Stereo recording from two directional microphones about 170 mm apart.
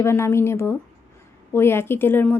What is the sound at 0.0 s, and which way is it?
Speech, 15° left (ahead or behind).